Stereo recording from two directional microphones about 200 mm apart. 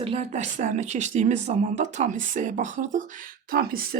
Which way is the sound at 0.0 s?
30° right (ahead or behind).